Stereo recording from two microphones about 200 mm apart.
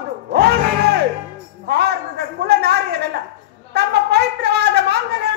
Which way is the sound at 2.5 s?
55° right (ahead or behind).